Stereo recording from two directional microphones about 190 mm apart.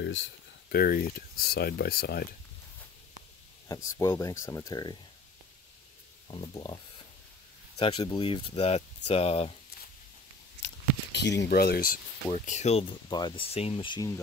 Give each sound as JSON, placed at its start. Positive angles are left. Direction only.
{"t": 0.0, "sound": "a sound", "side_deg": 75}
{"t": 0.7, "sound": "speech", "side_deg": 50}
{"t": 3.6, "sound": "speech", "side_deg": 15}
{"t": 6.2, "sound": "speech", "side_deg": 25}
{"t": 10.6, "sound": "a sound", "side_deg": 65}
{"t": 12.3, "sound": "speech", "side_deg": 40}